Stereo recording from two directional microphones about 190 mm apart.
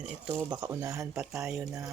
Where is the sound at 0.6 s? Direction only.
20° right (ahead or behind).